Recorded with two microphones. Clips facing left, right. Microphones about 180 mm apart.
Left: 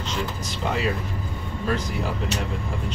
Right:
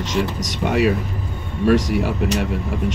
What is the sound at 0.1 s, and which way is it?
Speech, 75° right (ahead or behind).